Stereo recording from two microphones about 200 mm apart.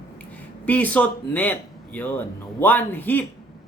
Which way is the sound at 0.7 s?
5° left (ahead or behind).